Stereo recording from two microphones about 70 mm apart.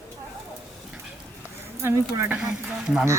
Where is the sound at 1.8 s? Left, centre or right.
Right.